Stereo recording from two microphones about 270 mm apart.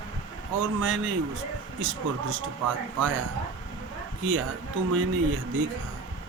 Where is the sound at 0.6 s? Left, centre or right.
Right.